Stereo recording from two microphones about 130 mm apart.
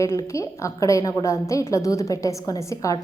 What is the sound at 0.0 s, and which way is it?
A woman's voice, 25° left (ahead or behind).